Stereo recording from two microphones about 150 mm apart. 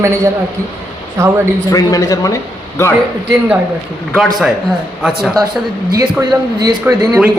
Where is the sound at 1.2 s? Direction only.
20° right (ahead or behind).